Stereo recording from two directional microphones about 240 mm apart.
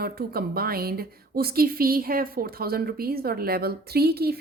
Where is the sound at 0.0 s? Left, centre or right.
Right.